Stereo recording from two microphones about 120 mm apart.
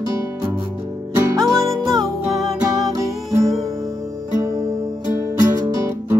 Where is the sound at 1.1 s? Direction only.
25° right (ahead or behind).